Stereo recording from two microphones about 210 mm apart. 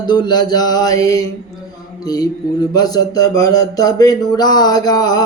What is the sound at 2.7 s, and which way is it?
A man's voice, 20° left (ahead or behind).